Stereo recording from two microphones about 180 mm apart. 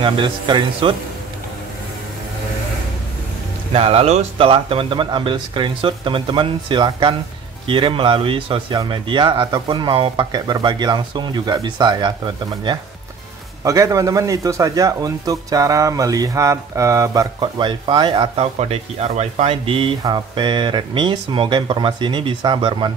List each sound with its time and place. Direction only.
0.0 s speech: 25° right (ahead or behind)
3.7 s speech: 35° right (ahead or behind)
13.7 s speech: 20° right (ahead or behind)